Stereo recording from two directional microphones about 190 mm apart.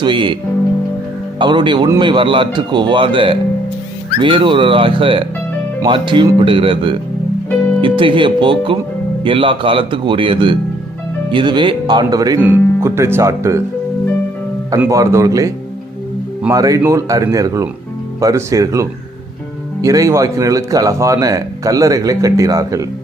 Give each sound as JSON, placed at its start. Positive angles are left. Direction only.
{"t": 0.0, "sound": "speech", "side_deg": -25}
{"t": 1.4, "sound": "speech", "side_deg": -25}
{"t": 14.8, "sound": "speech", "side_deg": -15}